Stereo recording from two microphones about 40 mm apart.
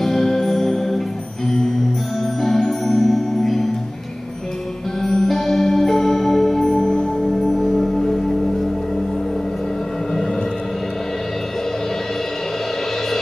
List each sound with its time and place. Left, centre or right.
0.0 s music: centre
2.4 s music: centre
5.0 s music: centre
6.8 s music: left
7.3 s music: centre
7.8 s music: centre